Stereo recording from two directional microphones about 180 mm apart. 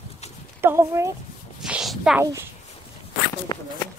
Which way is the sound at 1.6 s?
5° right (ahead or behind).